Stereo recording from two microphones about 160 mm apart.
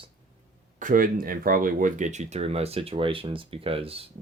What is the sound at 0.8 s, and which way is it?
Speech, 60° right (ahead or behind).